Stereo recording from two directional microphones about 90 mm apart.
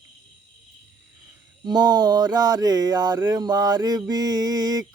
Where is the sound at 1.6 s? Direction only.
50° right (ahead or behind).